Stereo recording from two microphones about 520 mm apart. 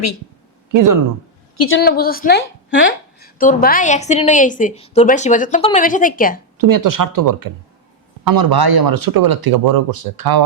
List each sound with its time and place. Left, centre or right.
0.7 s speech: right
1.5 s a woman's voice: left
6.6 s speech: right